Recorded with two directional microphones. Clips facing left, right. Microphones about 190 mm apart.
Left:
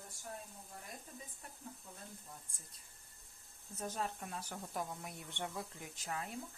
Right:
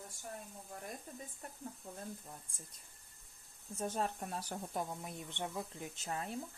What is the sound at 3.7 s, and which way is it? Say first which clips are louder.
Speech: right 4 dB; 30° right (ahead or behind).